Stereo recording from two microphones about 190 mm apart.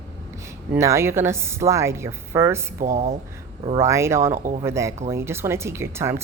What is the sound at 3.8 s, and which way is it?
Speech, 15° right (ahead or behind).